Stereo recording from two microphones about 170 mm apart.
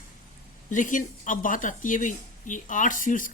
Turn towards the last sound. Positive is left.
turn(degrees=50)  # may be behind; listen again after turning